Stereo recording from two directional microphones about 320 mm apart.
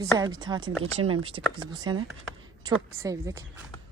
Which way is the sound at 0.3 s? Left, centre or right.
Centre.